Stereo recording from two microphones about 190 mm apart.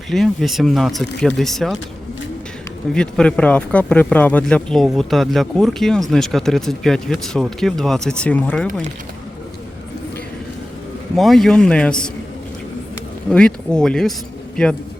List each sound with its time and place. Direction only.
0.1 s speech: centre (ahead or behind)
2.9 s speech: 5° left (ahead or behind)
11.2 s speech: centre (ahead or behind)
13.3 s speech: 5° left (ahead or behind)